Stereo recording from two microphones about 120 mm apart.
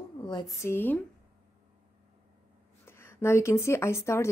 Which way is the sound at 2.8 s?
20° left (ahead or behind).